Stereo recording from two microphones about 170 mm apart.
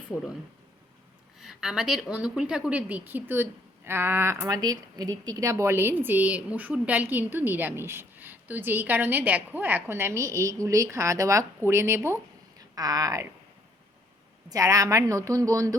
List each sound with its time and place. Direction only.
0.1 s speech: centre (ahead or behind)
1.5 s a woman's voice: centre (ahead or behind); by 13.2 s 20° right (ahead or behind)
14.5 s speech: 20° right (ahead or behind)